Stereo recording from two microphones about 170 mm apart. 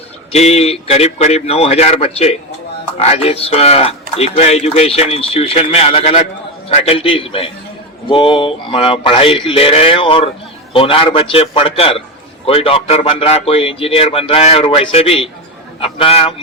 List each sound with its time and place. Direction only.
0.3 s speech: 40° left (ahead or behind)